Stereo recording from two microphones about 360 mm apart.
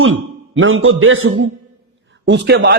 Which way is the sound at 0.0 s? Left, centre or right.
Right.